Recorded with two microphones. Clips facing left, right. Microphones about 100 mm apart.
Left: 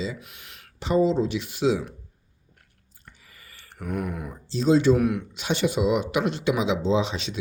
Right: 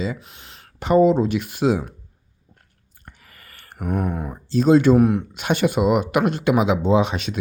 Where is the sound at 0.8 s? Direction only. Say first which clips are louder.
Right 6 dB; 55° right (ahead or behind).